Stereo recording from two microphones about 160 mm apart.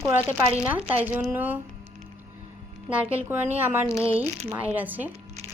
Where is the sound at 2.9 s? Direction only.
10° right (ahead or behind).